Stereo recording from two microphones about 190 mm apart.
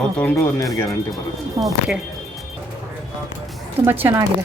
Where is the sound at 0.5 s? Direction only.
15° left (ahead or behind).